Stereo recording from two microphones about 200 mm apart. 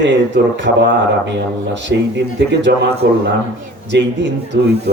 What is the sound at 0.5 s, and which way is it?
A man's voice, 60° right (ahead or behind).